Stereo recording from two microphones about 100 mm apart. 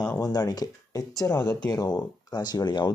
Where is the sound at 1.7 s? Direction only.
40° left (ahead or behind).